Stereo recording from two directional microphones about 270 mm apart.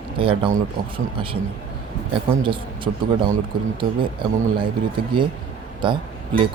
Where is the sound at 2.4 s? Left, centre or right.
Centre.